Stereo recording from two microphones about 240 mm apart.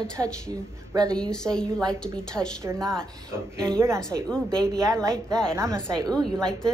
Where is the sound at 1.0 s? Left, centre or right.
Centre.